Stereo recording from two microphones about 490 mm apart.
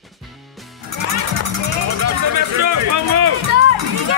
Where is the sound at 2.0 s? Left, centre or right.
Right.